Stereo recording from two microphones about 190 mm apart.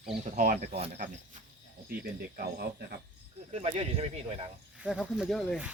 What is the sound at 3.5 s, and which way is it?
Speech, 30° right (ahead or behind).